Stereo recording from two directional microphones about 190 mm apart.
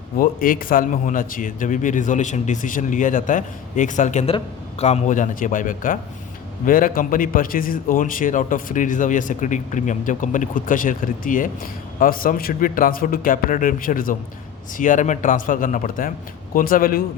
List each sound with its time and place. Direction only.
0.2 s a man's voice: 45° left (ahead or behind)